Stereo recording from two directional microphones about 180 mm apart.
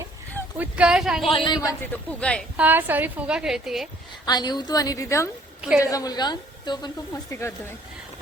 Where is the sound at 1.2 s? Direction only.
30° left (ahead or behind).